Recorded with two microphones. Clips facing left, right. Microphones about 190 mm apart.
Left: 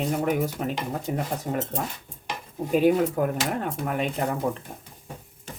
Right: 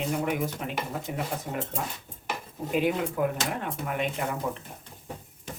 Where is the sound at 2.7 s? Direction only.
40° left (ahead or behind).